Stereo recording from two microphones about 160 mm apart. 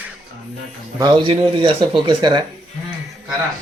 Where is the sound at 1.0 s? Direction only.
30° right (ahead or behind).